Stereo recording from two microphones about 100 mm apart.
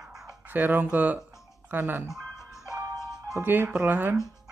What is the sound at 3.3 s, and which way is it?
Speech, 20° right (ahead or behind).